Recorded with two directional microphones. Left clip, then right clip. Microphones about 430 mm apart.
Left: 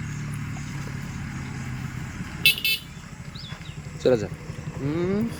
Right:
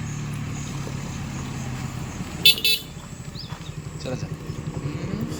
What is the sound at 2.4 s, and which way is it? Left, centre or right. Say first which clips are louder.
Vehicle: right 3 dB; centre.